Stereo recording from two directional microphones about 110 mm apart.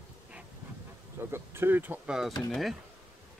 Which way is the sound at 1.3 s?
20° right (ahead or behind).